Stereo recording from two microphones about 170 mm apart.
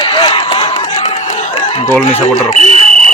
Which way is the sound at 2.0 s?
40° left (ahead or behind).